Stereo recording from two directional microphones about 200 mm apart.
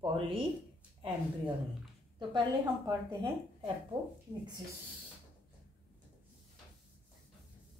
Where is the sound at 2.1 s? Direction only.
25° right (ahead or behind).